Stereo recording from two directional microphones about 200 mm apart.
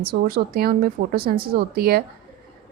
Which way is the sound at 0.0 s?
50° right (ahead or behind).